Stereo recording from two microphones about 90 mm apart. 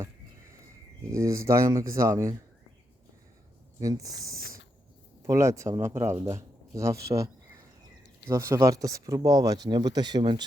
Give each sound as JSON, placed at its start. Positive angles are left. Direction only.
{"t": 1.1, "sound": "speech", "side_deg": -35}
{"t": 3.8, "sound": "speech", "side_deg": -40}
{"t": 8.3, "sound": "speech", "side_deg": -30}